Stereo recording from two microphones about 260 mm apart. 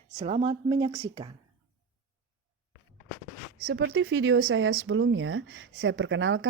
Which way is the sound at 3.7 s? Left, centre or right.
Right.